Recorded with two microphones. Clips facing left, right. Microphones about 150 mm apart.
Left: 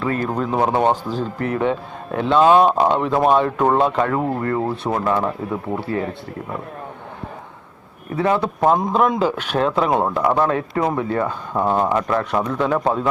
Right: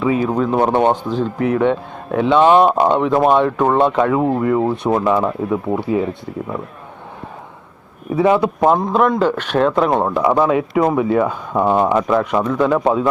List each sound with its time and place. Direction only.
0.0 s speech: 5° right (ahead or behind)
5.7 s speech: 40° right (ahead or behind)
8.1 s speech: 15° right (ahead or behind)